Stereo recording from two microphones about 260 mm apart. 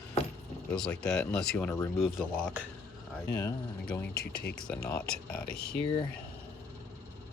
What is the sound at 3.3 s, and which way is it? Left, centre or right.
Speech, centre.